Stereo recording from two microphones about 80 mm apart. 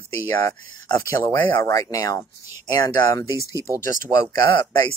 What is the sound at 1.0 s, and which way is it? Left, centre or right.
Speech, left.